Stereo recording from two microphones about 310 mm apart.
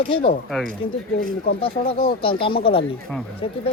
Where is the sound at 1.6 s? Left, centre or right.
Centre.